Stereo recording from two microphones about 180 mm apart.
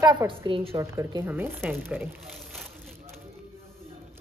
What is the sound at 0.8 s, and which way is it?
Speech, 15° right (ahead or behind).